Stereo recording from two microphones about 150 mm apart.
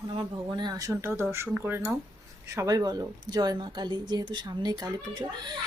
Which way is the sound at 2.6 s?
25° right (ahead or behind).